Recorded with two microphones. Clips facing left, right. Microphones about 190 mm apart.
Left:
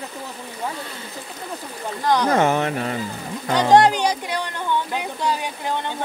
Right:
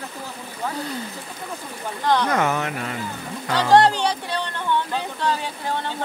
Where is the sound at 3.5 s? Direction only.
15° left (ahead or behind).